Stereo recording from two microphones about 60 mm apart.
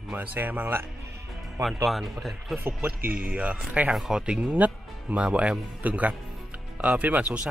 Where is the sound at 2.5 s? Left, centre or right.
Right.